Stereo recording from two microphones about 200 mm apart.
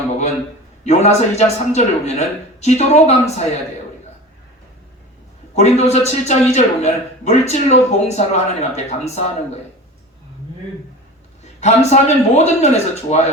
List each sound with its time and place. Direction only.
0.9 s speech: 35° left (ahead or behind)
5.5 s speech: 35° left (ahead or behind)
11.6 s speech: 35° left (ahead or behind)